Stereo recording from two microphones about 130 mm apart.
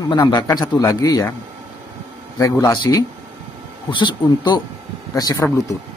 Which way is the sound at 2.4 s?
25° left (ahead or behind).